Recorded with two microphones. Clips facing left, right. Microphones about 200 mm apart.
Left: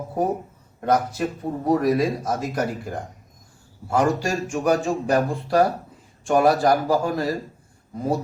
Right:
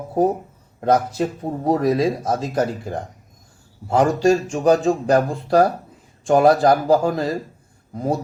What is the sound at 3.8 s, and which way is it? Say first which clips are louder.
Speech: right 5 dB; 25° right (ahead or behind).